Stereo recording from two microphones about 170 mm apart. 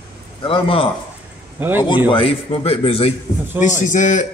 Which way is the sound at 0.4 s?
30° left (ahead or behind).